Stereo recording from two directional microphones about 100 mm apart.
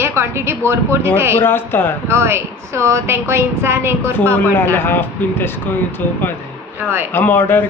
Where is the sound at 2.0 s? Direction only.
25° right (ahead or behind).